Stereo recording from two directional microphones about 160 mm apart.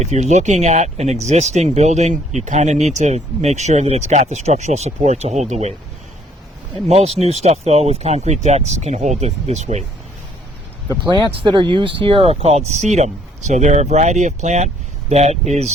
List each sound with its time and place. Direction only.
0.0 s speech: 45° right (ahead or behind)
6.8 s speech: 45° right (ahead or behind)
10.8 s speech: 25° right (ahead or behind); by 15.7 s 45° right (ahead or behind)